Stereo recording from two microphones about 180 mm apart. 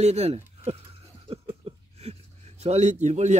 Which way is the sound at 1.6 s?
35° right (ahead or behind).